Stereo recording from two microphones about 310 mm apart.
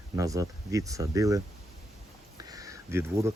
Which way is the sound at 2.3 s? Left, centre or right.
Centre.